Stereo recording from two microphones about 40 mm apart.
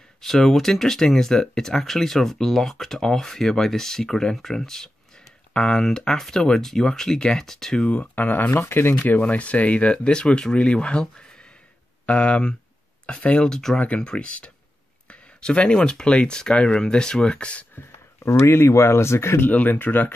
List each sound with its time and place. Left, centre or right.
0.2 s speech: centre
7.8 s speech: left
9.2 s speech: left
13.5 s speech: centre
13.7 s speech: left
18.2 s speech: left
19.4 s speech: left